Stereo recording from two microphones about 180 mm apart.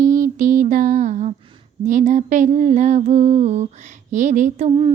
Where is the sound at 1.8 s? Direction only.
45° right (ahead or behind).